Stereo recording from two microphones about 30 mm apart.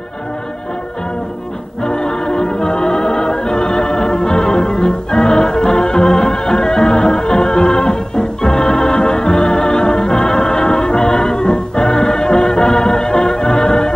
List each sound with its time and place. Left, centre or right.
1.9 s music: left